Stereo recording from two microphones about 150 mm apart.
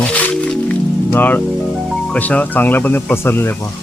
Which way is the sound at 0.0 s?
10° left (ahead or behind).